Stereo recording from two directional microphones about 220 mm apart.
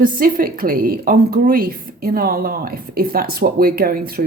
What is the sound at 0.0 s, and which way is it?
A woman's voice, 40° right (ahead or behind).